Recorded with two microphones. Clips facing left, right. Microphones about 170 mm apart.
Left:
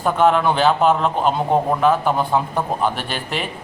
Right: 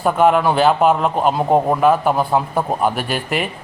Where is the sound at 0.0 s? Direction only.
5° right (ahead or behind).